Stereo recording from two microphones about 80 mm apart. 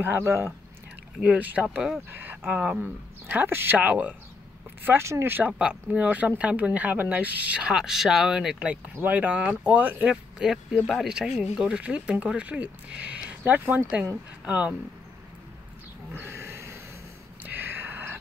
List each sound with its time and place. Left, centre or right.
0.0 s speech: right
1.2 s speech: centre
4.8 s speech: right
5.5 s speech: centre
7.7 s speech: centre
10.4 s speech: centre
16.1 s a sound: right